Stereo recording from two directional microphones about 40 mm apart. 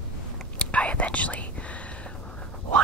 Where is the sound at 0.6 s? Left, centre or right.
Left.